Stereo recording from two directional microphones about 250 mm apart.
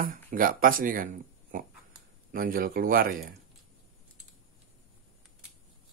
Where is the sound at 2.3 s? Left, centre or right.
Right.